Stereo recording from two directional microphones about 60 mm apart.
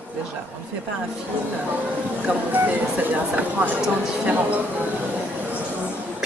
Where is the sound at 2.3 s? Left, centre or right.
Right.